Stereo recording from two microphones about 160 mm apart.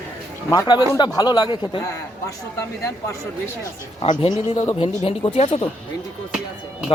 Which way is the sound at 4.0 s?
30° left (ahead or behind).